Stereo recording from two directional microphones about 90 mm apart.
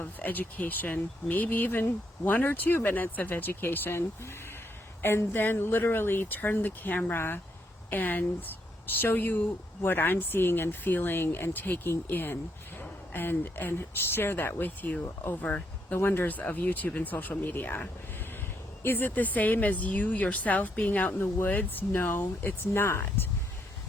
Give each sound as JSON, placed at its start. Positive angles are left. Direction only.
{"t": 0.0, "sound": "speech", "side_deg": 20}